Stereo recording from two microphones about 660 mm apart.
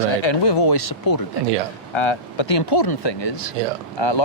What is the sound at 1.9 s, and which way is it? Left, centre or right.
Speech, left.